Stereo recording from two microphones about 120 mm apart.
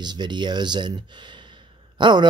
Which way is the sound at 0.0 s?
40° right (ahead or behind).